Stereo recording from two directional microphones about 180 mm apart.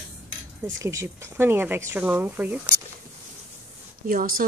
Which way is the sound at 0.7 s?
15° right (ahead or behind).